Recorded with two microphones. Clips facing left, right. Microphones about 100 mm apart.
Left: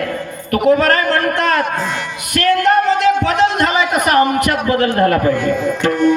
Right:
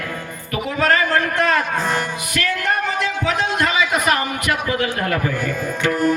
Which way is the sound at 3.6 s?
50° left (ahead or behind).